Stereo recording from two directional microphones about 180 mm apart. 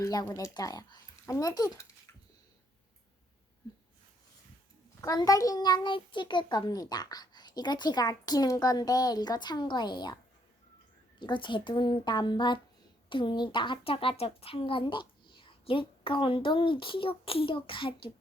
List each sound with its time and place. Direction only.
0.0 s a child's voice: 20° left (ahead or behind)
4.9 s a child's voice: 20° left (ahead or behind)
11.2 s a child's voice: 25° left (ahead or behind)